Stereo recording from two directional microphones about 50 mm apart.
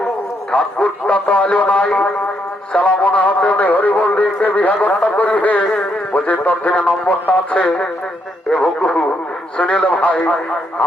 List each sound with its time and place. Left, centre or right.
0.5 s speech: left
2.7 s a sound: left
8.4 s speech: centre
8.8 s speech: centre